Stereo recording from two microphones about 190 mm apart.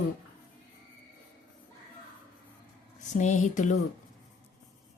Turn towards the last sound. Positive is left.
turn(degrees=40)  # may be behind; listen again after turning